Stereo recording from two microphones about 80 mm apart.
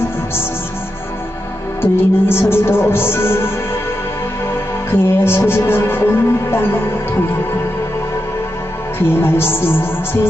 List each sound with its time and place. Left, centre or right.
1.8 s speech: left
4.9 s speech: left
9.0 s speech: left